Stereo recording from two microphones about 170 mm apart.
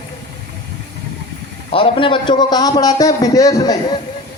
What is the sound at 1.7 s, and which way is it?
A man's voice, 30° left (ahead or behind).